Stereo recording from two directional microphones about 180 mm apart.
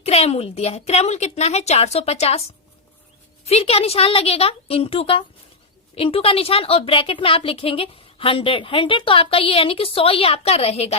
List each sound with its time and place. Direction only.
0.0 s a woman's voice: 35° left (ahead or behind)
3.4 s a woman's voice: 35° left (ahead or behind)